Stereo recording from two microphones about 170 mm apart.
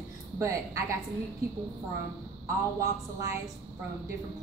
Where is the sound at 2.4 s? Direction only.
15° right (ahead or behind).